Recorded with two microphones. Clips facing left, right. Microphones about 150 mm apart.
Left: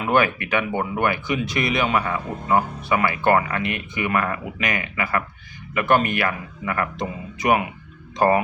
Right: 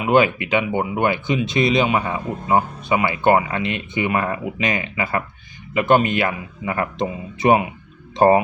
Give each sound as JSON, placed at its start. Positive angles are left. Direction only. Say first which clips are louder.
{"t": 0.0, "sound": "speech", "louder": "right 4 dB", "side_deg": -20}